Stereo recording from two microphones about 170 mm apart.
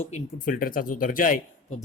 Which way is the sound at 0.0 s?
45° left (ahead or behind).